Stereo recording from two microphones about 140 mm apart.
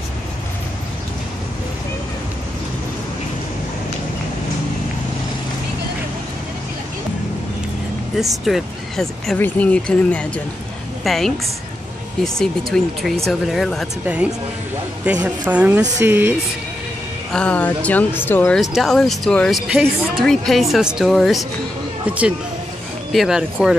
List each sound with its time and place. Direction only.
8.5 s speech: centre (ahead or behind)
12.7 s speech: 5° left (ahead or behind)
14.0 s a woman's voice: 10° right (ahead or behind)
17.3 s speech: 10° left (ahead or behind)
18.6 s speech: centre (ahead or behind)